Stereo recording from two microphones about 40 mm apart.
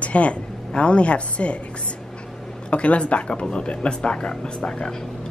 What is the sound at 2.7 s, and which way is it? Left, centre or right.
Speech, left.